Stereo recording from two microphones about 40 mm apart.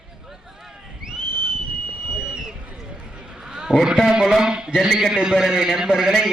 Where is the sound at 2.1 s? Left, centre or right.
Centre.